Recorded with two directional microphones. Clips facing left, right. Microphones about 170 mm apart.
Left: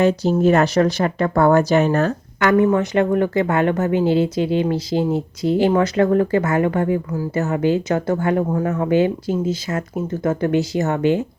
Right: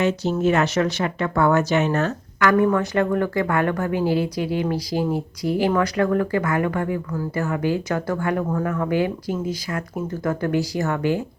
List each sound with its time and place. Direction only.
0.0 s speech: 35° left (ahead or behind)
2.4 s speech: 20° left (ahead or behind)